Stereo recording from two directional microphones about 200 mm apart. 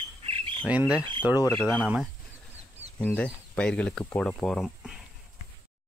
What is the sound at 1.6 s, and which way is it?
Speech, 5° left (ahead or behind).